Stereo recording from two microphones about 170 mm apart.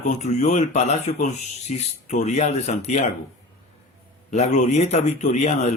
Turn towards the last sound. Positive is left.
turn(degrees=40)  # may be behind; listen again after turning